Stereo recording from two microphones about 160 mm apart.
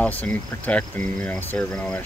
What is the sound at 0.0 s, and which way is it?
Speech, 10° left (ahead or behind).